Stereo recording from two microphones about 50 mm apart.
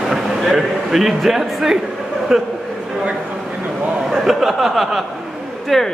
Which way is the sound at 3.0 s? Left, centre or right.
Right.